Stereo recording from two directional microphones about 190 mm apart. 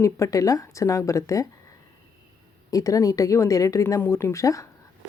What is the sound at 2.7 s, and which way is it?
Speech, 20° left (ahead or behind).